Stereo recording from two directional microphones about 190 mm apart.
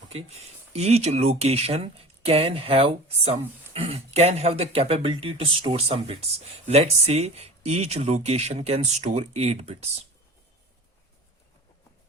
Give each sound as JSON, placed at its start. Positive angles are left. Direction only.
{"t": 0.1, "sound": "speech", "side_deg": -35}